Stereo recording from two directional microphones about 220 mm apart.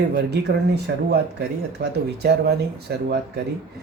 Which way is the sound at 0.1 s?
50° right (ahead or behind).